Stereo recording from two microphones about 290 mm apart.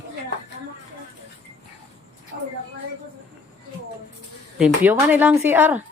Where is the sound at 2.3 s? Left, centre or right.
Right.